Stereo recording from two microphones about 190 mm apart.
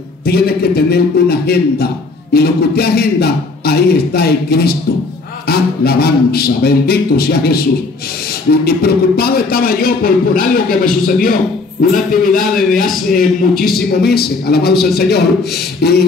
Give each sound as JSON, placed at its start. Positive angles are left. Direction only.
{"t": 0.2, "sound": "a man's voice", "side_deg": 55}
{"t": 8.6, "sound": "a man's voice", "side_deg": 55}